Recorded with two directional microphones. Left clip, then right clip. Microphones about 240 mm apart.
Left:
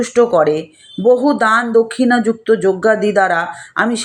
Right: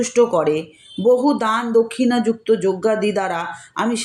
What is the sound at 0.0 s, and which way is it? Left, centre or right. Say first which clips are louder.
Speech: left 4 dB; centre.